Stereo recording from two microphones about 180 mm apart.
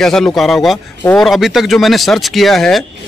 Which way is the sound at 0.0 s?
5° left (ahead or behind).